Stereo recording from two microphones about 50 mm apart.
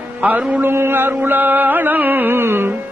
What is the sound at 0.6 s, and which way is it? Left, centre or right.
Music, right.